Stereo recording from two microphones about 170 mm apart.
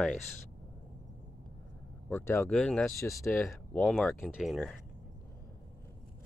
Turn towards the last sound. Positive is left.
turn(degrees=0)  # may be behind; listen again after turning